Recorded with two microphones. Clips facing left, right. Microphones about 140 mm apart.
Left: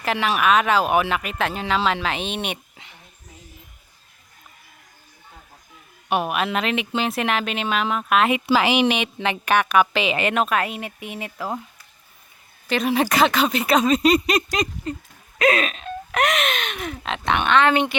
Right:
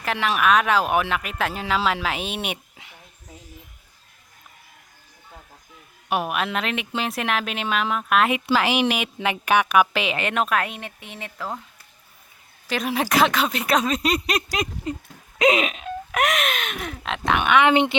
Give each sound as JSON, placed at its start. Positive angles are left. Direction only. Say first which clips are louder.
{"t": 0.0, "sound": "speech", "louder": "left 1 dB", "side_deg": 0}
{"t": 6.1, "sound": "speech", "louder": "left 2 dB", "side_deg": 0}
{"t": 12.6, "sound": "speech", "louder": "left 4 dB", "side_deg": 0}
{"t": 15.4, "sound": "a sound", "louder": "right 1 dB", "side_deg": -15}
{"t": 16.1, "sound": "speech", "louder": "left 1 dB", "side_deg": 0}